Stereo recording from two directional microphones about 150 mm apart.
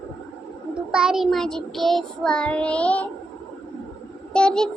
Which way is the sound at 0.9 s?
5° right (ahead or behind).